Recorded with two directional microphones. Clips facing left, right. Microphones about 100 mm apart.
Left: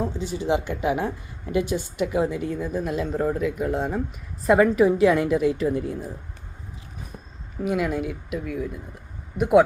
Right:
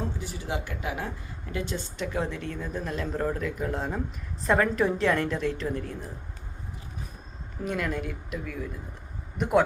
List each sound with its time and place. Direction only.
0.2 s a woman's voice: 20° left (ahead or behind)
7.6 s a woman's voice: 10° left (ahead or behind)